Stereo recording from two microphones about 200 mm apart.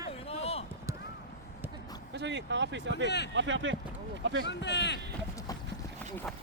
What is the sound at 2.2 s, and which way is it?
Speech, 60° right (ahead or behind).